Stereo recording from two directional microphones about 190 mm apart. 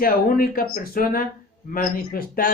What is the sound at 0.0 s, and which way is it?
Speech, 50° left (ahead or behind).